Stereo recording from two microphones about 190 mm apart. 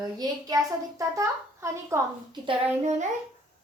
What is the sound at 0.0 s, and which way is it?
A woman's voice, 20° right (ahead or behind).